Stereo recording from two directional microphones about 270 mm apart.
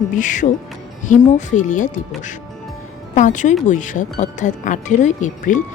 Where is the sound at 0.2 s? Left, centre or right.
Left.